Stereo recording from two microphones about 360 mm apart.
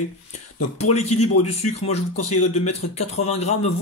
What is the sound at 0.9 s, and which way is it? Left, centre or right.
Speech, centre.